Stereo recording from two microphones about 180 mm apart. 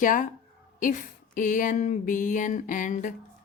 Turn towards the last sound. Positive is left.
turn(degrees=45)  # may be behind; listen again after turning